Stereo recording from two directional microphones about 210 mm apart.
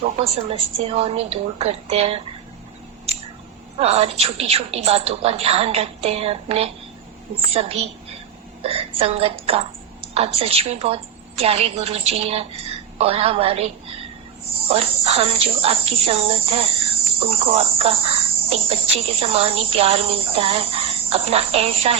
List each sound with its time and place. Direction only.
0.2 s cricket: 30° right (ahead or behind)
3.8 s cricket: 30° right (ahead or behind)
14.7 s cricket: 30° right (ahead or behind)